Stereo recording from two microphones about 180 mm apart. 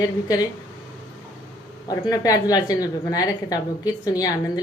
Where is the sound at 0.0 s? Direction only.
20° left (ahead or behind).